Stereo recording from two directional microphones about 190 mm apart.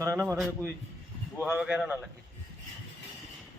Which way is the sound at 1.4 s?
5° right (ahead or behind).